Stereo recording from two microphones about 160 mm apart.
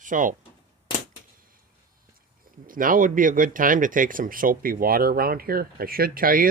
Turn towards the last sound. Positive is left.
turn(degrees=-60)  # may be behind; listen again after turning